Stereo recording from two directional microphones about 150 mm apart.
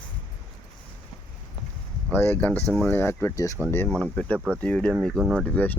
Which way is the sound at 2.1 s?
10° left (ahead or behind).